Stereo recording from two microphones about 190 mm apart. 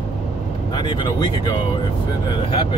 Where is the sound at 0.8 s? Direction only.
25° left (ahead or behind).